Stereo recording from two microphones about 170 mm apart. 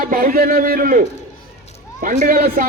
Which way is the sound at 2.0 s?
55° right (ahead or behind).